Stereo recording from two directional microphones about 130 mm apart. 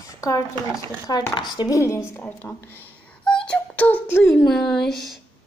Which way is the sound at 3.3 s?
5° left (ahead or behind).